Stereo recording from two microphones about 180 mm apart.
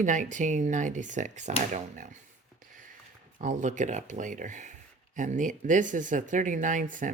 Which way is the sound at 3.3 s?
45° right (ahead or behind).